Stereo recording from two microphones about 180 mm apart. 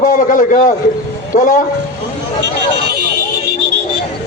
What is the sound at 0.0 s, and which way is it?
A man's voice, 45° left (ahead or behind).